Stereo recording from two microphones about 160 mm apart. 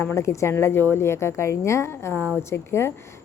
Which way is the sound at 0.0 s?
15° left (ahead or behind).